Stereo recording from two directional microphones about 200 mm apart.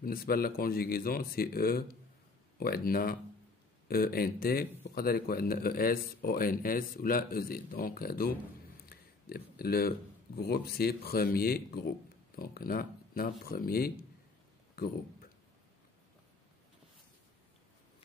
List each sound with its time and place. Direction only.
0.0 s a man's voice: 45° left (ahead or behind)